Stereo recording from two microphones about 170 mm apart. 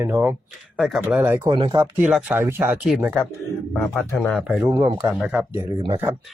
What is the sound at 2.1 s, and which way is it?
Speech, 10° right (ahead or behind).